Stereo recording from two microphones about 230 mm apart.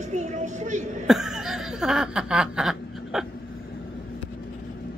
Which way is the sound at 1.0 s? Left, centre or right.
Centre.